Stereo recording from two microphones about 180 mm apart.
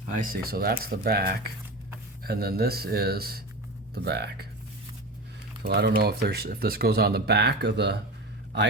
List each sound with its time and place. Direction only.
0.1 s speech: 50° right (ahead or behind)
5.6 s speech: 60° right (ahead or behind)